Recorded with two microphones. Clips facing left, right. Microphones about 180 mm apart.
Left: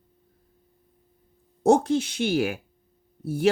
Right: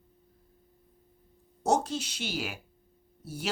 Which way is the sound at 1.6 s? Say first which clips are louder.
Left 8 dB; 55° left (ahead or behind).